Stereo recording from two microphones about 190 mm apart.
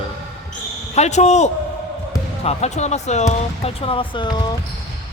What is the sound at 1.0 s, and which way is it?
Speech, 35° left (ahead or behind).